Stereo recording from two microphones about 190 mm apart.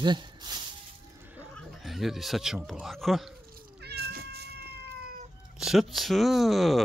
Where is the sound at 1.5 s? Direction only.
Centre (ahead or behind).